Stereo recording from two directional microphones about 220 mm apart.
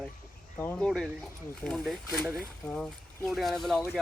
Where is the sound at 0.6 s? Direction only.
5° left (ahead or behind).